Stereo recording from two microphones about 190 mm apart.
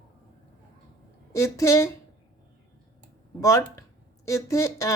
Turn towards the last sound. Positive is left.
turn(degrees=15)  # may be behind; listen again after turning